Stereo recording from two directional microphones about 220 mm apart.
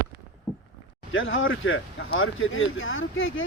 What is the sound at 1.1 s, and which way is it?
Speech, 60° left (ahead or behind).